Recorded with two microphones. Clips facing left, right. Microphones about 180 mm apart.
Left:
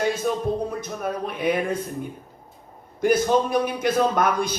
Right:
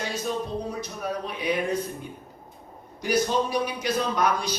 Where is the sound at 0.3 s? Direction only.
50° left (ahead or behind).